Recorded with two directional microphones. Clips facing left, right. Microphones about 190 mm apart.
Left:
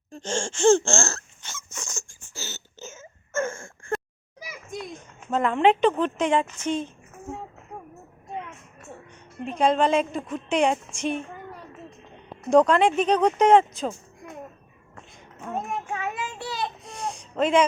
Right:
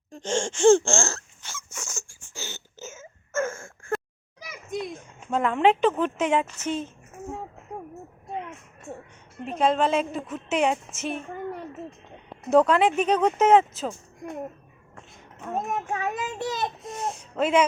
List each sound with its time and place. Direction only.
0.1 s a woman's voice: 15° right (ahead or behind)
1.4 s wail: 5° right (ahead or behind)
5.3 s a woman's voice: 5° right (ahead or behind)
9.4 s a woman's voice: 5° right (ahead or behind)
12.5 s a woman's voice: 5° right (ahead or behind)
15.6 s a child's voice: 40° right (ahead or behind)
16.5 s a sound: 45° right (ahead or behind)
16.8 s a sound: 5° right (ahead or behind)